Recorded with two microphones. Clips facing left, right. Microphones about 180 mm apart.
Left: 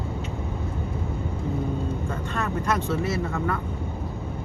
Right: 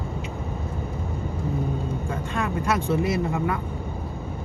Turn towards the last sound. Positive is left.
turn(degrees=-10)  # may be behind; listen again after turning